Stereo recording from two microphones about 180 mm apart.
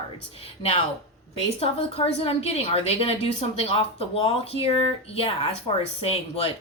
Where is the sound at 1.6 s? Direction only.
35° left (ahead or behind).